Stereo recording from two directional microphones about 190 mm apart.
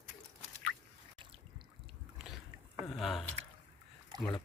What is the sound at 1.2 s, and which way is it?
Boat, 25° right (ahead or behind).